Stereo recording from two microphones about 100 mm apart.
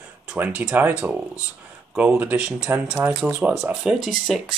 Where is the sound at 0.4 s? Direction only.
15° right (ahead or behind).